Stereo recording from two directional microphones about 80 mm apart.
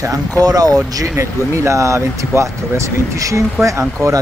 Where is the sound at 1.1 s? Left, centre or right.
Right.